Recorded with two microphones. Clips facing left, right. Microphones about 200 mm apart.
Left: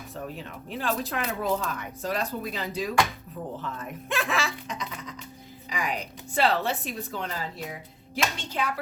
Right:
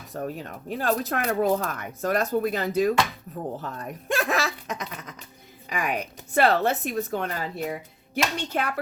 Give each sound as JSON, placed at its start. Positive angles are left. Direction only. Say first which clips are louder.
{"t": 0.1, "sound": "speech", "louder": "right 6 dB", "side_deg": -45}
{"t": 5.6, "sound": "a woman's voice", "louder": "right 3 dB", "side_deg": -55}